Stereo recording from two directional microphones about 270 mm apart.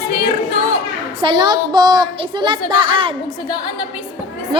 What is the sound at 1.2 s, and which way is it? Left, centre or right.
A woman's voice, centre.